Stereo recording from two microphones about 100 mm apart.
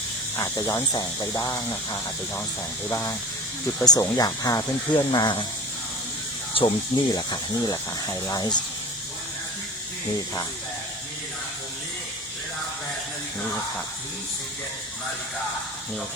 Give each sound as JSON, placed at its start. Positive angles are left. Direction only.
{"t": 0.3, "sound": "speech", "side_deg": 30}
{"t": 2.9, "sound": "speech", "side_deg": 25}
{"t": 3.8, "sound": "speech", "side_deg": 40}
{"t": 6.5, "sound": "speech", "side_deg": 60}
{"t": 7.1, "sound": "speech", "side_deg": 40}